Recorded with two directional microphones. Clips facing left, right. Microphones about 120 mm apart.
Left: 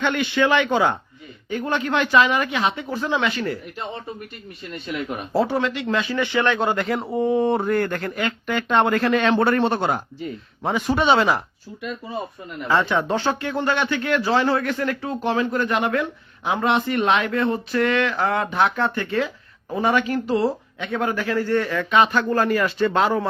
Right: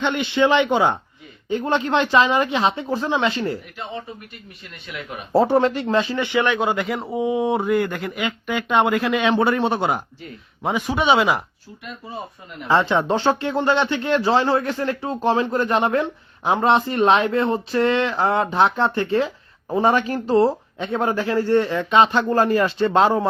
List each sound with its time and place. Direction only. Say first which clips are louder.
0.0 s speech: right 1 dB; 20° right (ahead or behind)
5.3 s a man's voice: right 5 dB; 40° right (ahead or behind); by 11.4 s 10° right (ahead or behind)
12.6 s speech: right 2 dB; 25° right (ahead or behind)